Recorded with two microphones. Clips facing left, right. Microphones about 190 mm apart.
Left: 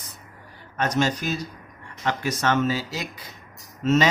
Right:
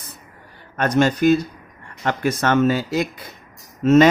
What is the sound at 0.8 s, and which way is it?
Speech, 55° right (ahead or behind).